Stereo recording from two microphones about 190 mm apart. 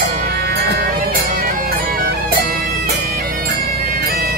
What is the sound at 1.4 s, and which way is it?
Bagpipes, 50° right (ahead or behind).